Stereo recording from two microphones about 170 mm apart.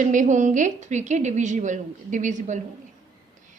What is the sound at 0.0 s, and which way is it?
A woman's voice, 50° right (ahead or behind).